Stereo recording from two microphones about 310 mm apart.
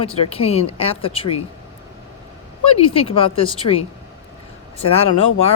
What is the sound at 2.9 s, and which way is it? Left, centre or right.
Speech, centre.